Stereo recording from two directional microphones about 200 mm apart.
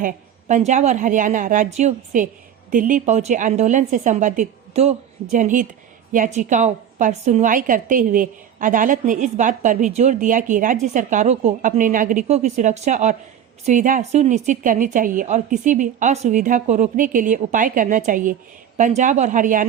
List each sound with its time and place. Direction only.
0.0 s a woman's voice: 40° right (ahead or behind)